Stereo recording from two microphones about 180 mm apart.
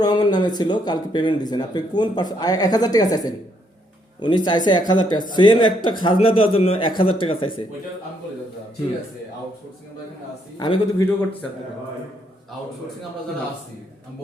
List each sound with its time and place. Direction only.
0.0 s speech: 20° left (ahead or behind)
10.6 s a man's voice: 20° left (ahead or behind)